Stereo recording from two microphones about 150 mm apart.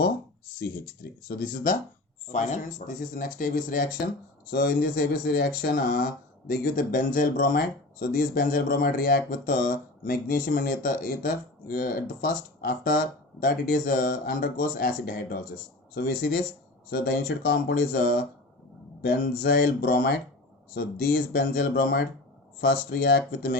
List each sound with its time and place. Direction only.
1.3 s speech: 70° left (ahead or behind)
4.5 s speech: 90° left; by 15.4 s 75° left (ahead or behind)
16.0 s speech: 90° left